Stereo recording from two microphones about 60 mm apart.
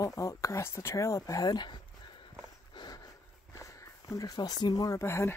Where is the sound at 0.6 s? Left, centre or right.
Left.